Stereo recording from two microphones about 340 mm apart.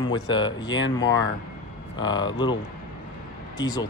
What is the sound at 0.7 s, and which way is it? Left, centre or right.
Speech, left.